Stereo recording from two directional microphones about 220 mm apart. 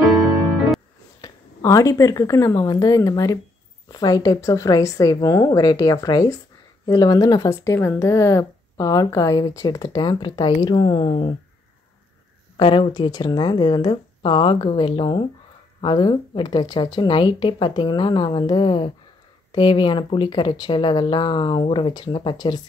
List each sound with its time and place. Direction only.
1.2 s speech: 15° left (ahead or behind)
12.5 s speech: 20° left (ahead or behind)